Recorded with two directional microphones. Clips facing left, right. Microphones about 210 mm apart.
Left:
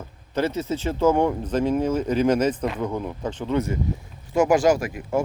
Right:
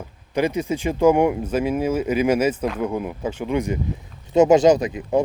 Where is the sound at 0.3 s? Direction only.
15° right (ahead or behind).